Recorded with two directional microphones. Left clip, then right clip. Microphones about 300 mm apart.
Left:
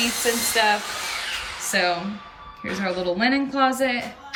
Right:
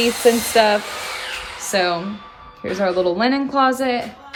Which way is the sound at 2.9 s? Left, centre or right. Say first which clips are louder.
Right 3 dB; centre.